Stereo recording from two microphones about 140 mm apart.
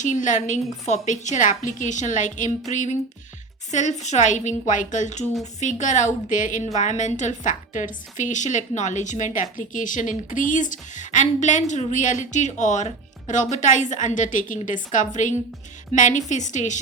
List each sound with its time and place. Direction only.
0.0 s a woman's voice: 65° left (ahead or behind)